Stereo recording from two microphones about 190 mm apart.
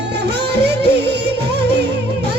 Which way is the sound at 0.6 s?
60° right (ahead or behind).